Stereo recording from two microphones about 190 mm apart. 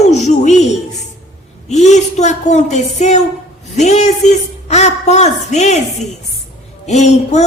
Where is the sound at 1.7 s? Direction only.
35° left (ahead or behind).